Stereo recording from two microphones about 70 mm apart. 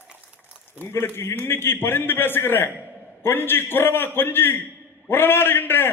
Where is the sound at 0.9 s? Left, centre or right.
Left.